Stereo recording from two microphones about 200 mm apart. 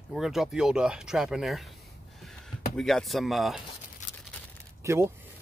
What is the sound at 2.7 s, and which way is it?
Speech, centre (ahead or behind).